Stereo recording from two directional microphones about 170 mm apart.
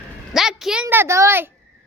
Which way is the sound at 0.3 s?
5° right (ahead or behind).